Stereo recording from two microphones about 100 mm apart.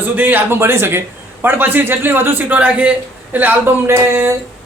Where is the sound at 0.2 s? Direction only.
20° right (ahead or behind).